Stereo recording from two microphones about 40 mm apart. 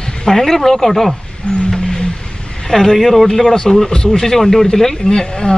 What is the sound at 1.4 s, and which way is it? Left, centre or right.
Music, left.